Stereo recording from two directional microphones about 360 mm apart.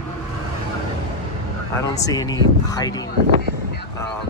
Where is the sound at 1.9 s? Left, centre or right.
Centre.